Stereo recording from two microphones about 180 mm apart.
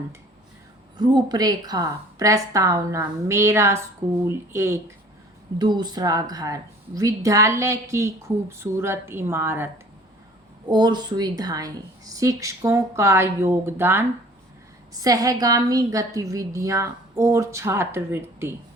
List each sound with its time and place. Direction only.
0.9 s a woman's voice: 25° right (ahead or behind)
10.7 s a woman's voice: 25° right (ahead or behind)